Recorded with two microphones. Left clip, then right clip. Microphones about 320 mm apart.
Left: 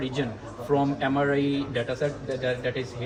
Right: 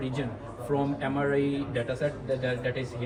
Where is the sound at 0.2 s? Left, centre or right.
Centre.